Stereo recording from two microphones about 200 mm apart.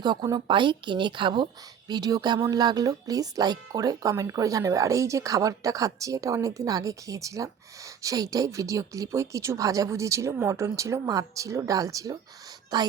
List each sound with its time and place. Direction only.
0.0 s speech: 20° right (ahead or behind)